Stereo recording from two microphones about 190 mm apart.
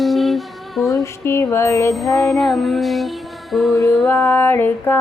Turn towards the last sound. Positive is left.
turn(degrees=10)  # may be behind; listen again after turning